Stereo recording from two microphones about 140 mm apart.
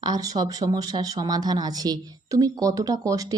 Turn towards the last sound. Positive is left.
turn(degrees=-25)  # may be behind; listen again after turning